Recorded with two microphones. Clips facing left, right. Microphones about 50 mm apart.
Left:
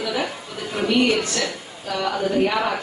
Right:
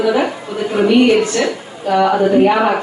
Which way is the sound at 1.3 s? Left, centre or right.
Right.